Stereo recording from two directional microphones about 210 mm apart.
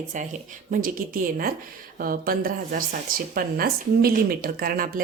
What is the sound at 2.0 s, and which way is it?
Speech, 45° right (ahead or behind).